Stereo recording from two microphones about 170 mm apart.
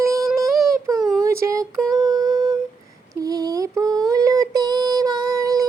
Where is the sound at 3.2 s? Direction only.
20° right (ahead or behind).